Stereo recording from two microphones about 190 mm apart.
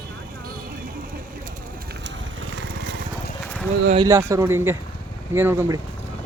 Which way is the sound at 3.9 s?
20° right (ahead or behind).